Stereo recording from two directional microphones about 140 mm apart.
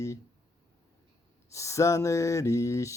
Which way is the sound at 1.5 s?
20° left (ahead or behind).